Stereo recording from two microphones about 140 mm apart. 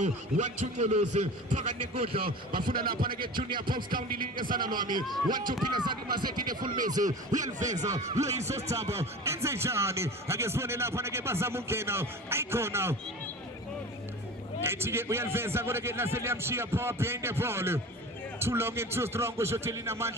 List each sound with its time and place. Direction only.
0.0 s a man's voice: 55° right (ahead or behind)
2.2 s speech: 90° right
3.3 s speech: 35° right (ahead or behind)
4.1 s speech: 90° right
4.7 s speech: 30° right (ahead or behind)
7.6 s a man's voice: 55° right (ahead or behind)
8.2 s speech: 20° right (ahead or behind)
14.6 s speech: 15° right (ahead or behind)